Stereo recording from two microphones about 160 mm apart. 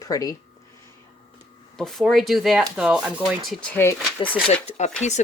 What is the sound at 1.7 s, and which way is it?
Speech, 5° left (ahead or behind).